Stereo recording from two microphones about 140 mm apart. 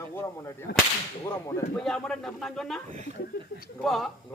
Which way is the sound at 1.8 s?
5° left (ahead or behind).